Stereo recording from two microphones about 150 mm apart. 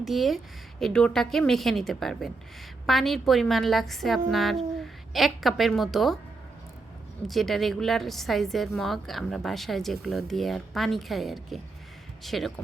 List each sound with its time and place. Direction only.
0.0 s a woman's voice: centre (ahead or behind)
7.3 s a woman's voice: centre (ahead or behind)